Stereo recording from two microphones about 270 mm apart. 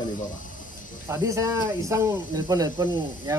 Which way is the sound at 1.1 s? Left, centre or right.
Centre.